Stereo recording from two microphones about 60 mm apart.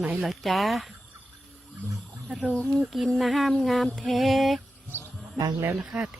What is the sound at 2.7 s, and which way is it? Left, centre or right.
Speech, centre.